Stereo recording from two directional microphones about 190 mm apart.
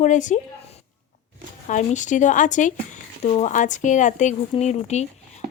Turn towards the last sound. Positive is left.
turn(degrees=35)  # may be behind; listen again after turning